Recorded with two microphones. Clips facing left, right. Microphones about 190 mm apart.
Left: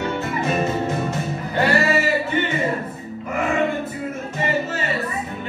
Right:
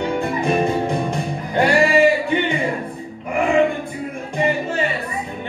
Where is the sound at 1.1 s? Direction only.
5° left (ahead or behind).